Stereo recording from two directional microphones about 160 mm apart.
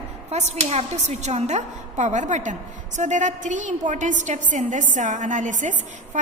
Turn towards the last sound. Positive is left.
turn(degrees=-50)  # may be behind; listen again after turning